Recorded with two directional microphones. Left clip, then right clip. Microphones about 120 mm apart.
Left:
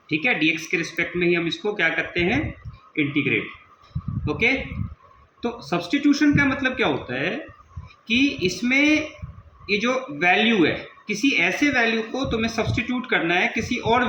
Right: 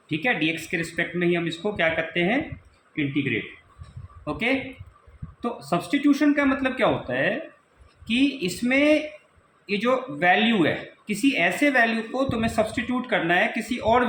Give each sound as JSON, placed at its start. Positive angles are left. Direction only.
{"t": 0.1, "sound": "speech", "side_deg": -35}
{"t": 2.9, "sound": "a man's voice", "side_deg": -20}
{"t": 4.3, "sound": "speech", "side_deg": -35}